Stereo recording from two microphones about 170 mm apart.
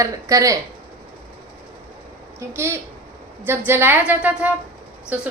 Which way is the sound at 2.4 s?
15° right (ahead or behind).